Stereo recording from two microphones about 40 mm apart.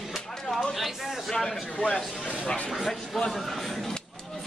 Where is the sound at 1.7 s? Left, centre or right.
Left.